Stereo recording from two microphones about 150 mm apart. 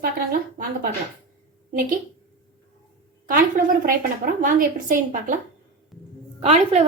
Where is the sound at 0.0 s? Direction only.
70° right (ahead or behind).